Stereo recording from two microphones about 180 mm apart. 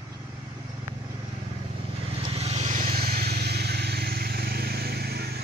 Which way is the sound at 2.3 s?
35° right (ahead or behind).